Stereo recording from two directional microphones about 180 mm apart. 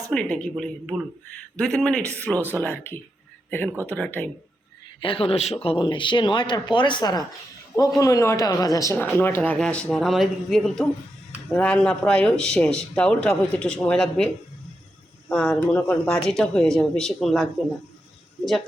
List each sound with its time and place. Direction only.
0.1 s a man's voice: 5° left (ahead or behind)
3.7 s speech: 10° right (ahead or behind)
3.9 s a man's voice: 5° left (ahead or behind)
4.9 s a man's voice: 30° left (ahead or behind); by 14.3 s 5° left (ahead or behind)
15.3 s speech: 5° left (ahead or behind)